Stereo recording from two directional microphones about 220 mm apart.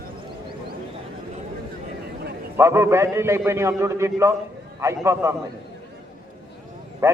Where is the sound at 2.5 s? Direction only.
10° right (ahead or behind).